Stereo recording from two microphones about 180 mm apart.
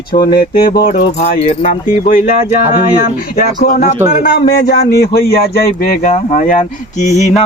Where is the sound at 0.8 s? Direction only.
40° left (ahead or behind).